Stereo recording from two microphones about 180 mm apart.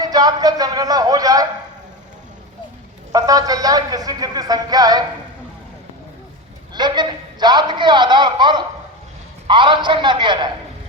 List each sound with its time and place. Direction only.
0.0 s a man's voice: 20° right (ahead or behind)
3.1 s a man's voice: 20° right (ahead or behind)
6.7 s a man's voice: 25° right (ahead or behind)